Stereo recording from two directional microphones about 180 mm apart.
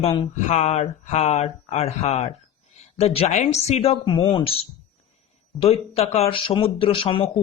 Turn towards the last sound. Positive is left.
turn(degrees=30)  # may be behind; listen again after turning